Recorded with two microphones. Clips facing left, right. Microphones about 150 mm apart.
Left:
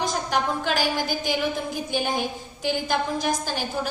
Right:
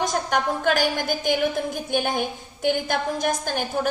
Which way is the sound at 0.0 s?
50° right (ahead or behind).